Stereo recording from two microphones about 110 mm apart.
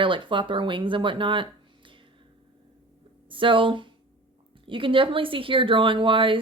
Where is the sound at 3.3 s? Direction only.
50° right (ahead or behind).